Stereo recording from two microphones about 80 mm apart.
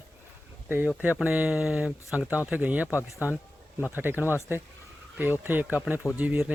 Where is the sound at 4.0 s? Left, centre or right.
Right.